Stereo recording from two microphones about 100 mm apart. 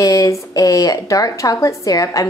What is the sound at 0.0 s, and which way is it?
Speech, 35° left (ahead or behind).